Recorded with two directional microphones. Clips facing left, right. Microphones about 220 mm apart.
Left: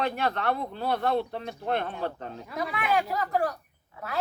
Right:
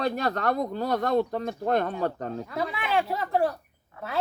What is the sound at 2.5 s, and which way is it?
Speech, 30° right (ahead or behind).